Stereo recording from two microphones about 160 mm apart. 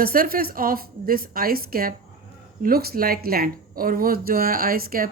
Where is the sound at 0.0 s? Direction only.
65° right (ahead or behind).